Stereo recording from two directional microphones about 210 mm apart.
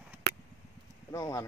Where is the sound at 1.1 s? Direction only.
15° left (ahead or behind).